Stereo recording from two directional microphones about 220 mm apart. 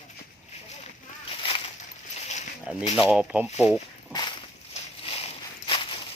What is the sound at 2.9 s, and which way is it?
Speech, 5° right (ahead or behind).